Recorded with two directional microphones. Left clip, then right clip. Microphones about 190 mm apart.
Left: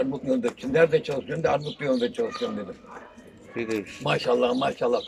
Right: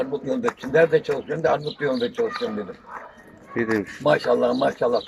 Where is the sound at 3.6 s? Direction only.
15° left (ahead or behind).